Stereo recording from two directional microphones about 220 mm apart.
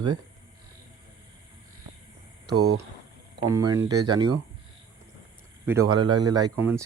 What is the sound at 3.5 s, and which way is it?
Speech, 15° right (ahead or behind).